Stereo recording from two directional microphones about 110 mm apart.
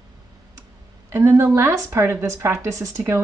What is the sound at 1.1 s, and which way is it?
Speech, 25° right (ahead or behind).